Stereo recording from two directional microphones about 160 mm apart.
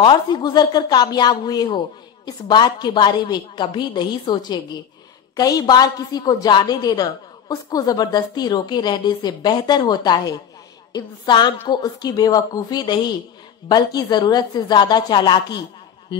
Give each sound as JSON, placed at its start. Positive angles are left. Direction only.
{"t": 0.0, "sound": "a woman's voice", "side_deg": 30}